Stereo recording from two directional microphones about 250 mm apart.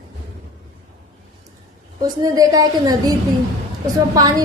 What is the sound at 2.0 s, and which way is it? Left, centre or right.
A woman's voice, centre.